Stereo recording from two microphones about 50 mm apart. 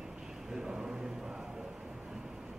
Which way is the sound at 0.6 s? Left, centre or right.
Centre.